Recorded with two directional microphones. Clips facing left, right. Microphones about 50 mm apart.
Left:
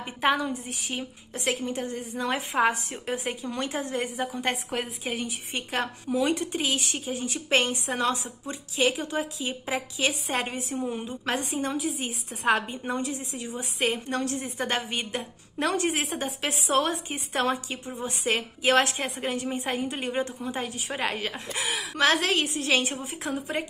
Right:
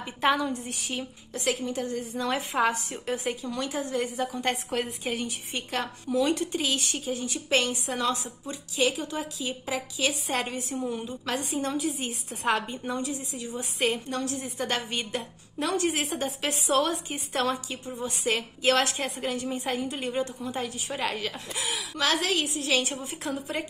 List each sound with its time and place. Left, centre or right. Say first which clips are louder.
0.2 s a woman's voice: even; centre
1.3 s a woman's voice: even; left
5.0 s a woman's voice: even; centre
5.5 s a woman's voice: left 3 dB; left
12.8 s a woman's voice: left 1 dB; left
13.6 s a woman's voice: even; left
14.0 s a woman's voice: left 2 dB; left
14.9 s a woman's voice: even; left
15.6 s a woman's voice: left 1 dB; left